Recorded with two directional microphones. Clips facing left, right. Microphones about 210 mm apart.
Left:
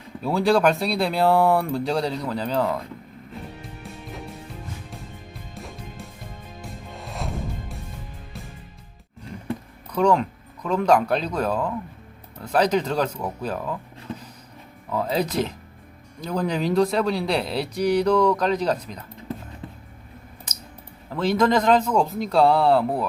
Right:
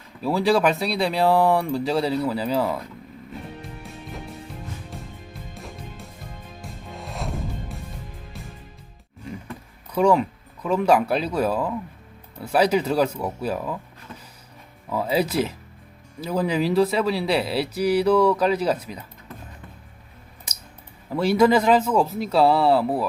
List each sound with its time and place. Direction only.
0.2 s speech: centre (ahead or behind)
3.6 s music: centre (ahead or behind)
5.5 s music: centre (ahead or behind)
9.9 s speech: 5° right (ahead or behind)
14.8 s speech: 5° right (ahead or behind)
20.5 s a sound: 10° right (ahead or behind)
21.1 s speech: 10° right (ahead or behind)